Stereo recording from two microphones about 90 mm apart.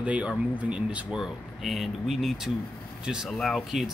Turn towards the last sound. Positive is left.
turn(degrees=0)  # may be behind; listen again after turning